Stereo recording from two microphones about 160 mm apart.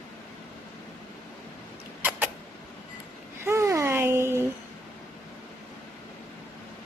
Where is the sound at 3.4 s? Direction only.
15° right (ahead or behind).